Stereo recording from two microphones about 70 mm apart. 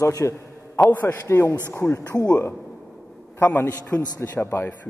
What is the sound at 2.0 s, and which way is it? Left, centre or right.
Speech, left.